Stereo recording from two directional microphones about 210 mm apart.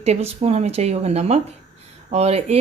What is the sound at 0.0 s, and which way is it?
Speech, 30° right (ahead or behind).